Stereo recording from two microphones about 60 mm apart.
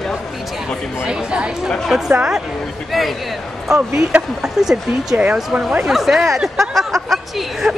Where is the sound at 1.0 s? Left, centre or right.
Centre.